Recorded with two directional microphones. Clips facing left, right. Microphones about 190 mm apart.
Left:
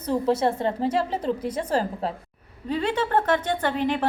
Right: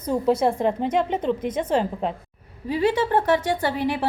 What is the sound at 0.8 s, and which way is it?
Speech, 30° left (ahead or behind).